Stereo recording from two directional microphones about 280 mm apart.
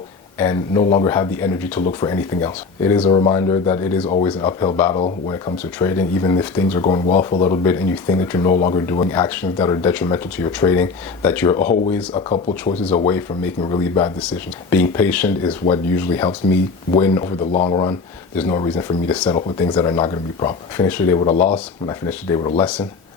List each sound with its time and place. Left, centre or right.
0.3 s speech: centre
13.1 s speech: centre
15.4 s speech: centre